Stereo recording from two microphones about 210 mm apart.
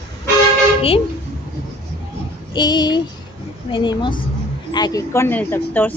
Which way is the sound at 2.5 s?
20° left (ahead or behind).